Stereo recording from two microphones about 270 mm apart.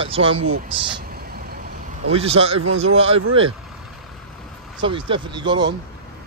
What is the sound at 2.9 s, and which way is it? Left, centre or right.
Speech, right.